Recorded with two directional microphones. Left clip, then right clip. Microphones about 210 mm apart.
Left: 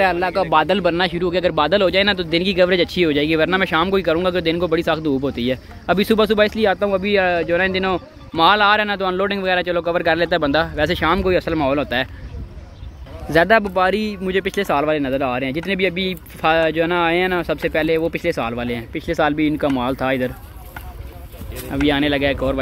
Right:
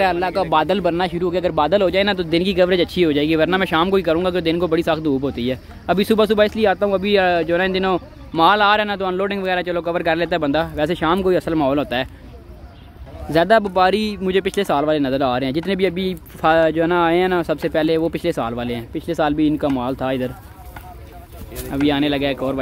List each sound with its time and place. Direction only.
0.0 s speech: 5° right (ahead or behind)
13.3 s speech: 5° right (ahead or behind)
21.8 s speech: 5° right (ahead or behind)